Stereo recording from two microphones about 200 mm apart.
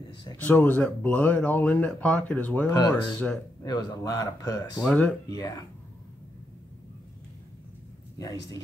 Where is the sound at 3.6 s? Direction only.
20° left (ahead or behind).